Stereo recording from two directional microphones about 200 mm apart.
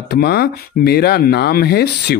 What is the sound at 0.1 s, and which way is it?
Speech, 50° left (ahead or behind).